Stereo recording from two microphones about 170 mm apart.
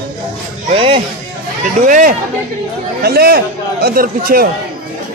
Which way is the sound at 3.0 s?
65° right (ahead or behind).